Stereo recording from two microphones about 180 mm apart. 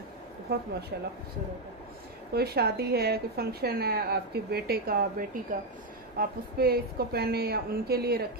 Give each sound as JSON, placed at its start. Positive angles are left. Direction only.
{"t": 0.5, "sound": "a woman's voice", "side_deg": -60}
{"t": 2.3, "sound": "a woman's voice", "side_deg": -60}